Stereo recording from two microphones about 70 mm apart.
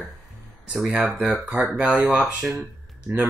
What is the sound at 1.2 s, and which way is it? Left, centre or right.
Speech, centre.